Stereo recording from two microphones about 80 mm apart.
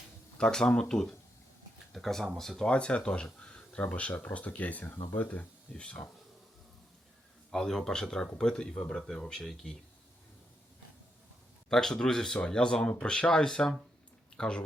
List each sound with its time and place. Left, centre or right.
0.3 s speech: centre
7.5 s speech: centre
11.7 s speech: centre